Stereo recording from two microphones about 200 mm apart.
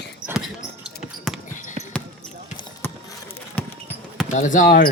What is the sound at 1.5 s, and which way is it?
Basketball bounce, 40° left (ahead or behind).